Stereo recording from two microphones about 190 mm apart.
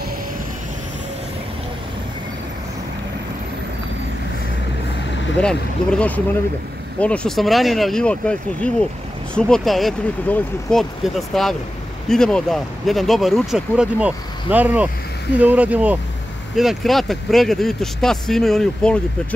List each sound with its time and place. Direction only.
5.4 s speech: 5° left (ahead or behind)